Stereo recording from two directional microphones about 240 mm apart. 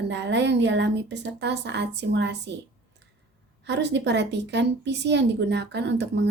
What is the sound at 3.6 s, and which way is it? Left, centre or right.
A woman's voice, right.